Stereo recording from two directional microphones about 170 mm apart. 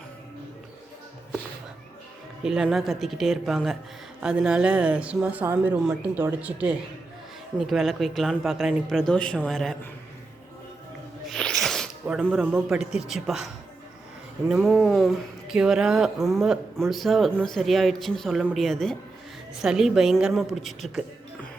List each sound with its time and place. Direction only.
2.4 s speech: 5° right (ahead or behind)
11.3 s music: 5° left (ahead or behind)
12.6 s speech: 5° right (ahead or behind)